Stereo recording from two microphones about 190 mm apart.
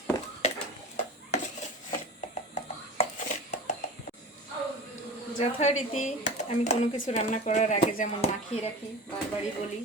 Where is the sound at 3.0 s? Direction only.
35° left (ahead or behind).